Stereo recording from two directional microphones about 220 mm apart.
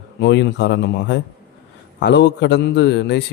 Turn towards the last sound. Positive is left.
turn(degrees=50)  # may be behind; listen again after turning